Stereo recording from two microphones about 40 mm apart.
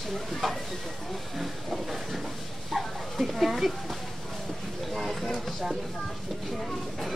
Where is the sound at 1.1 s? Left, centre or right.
Centre.